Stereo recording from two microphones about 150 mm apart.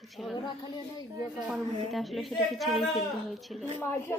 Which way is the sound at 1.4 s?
Centre (ahead or behind).